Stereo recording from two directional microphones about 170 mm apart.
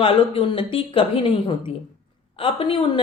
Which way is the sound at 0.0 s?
30° left (ahead or behind).